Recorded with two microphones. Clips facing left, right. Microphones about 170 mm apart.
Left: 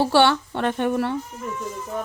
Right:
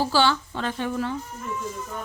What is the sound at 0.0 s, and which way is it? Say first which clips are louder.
Speech: left 4 dB; 65° left (ahead or behind).